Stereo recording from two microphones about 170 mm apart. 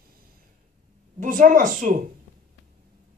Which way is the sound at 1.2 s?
50° right (ahead or behind).